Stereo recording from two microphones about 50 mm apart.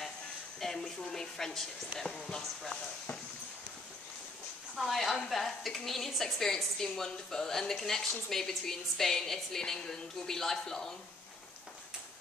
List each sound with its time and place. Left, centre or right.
0.6 s a woman's voice: centre
4.7 s a woman's voice: centre